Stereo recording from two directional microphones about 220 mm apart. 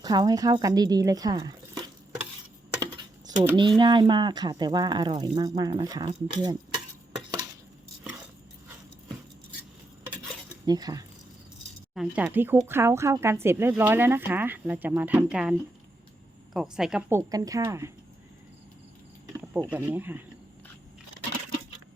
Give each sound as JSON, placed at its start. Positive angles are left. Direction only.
{"t": 0.0, "sound": "speech", "side_deg": -20}
{"t": 2.8, "sound": "typing", "side_deg": -20}
{"t": 3.8, "sound": "speech", "side_deg": -20}
{"t": 10.7, "sound": "speech", "side_deg": -15}
{"t": 16.6, "sound": "speech", "side_deg": 0}
{"t": 19.7, "sound": "speech", "side_deg": -10}